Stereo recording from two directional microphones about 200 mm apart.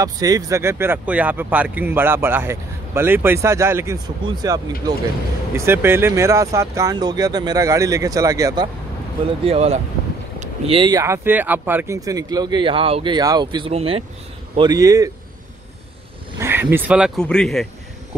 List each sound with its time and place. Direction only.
0.0 s speech: 15° right (ahead or behind)
9.5 s speech: 30° right (ahead or behind)
16.3 s speech: 10° right (ahead or behind)